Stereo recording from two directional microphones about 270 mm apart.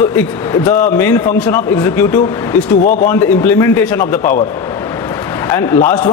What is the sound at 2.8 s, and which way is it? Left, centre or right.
Speech, left.